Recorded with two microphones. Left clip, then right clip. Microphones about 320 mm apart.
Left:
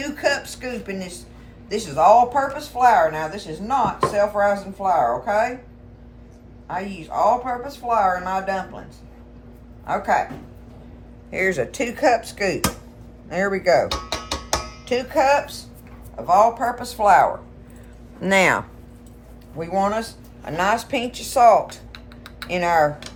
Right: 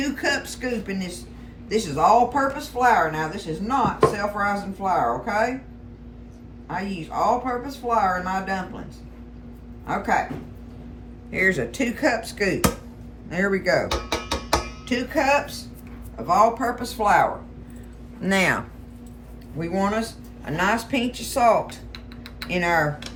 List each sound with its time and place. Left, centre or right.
0.0 s a woman's voice: centre
6.7 s speech: centre
9.8 s speech: centre
11.3 s speech: centre
18.2 s speech: left
19.5 s speech: centre
21.9 s typing: centre
22.4 s speech: centre